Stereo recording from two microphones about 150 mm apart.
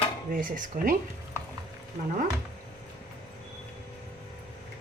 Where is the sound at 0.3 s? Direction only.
65° right (ahead or behind).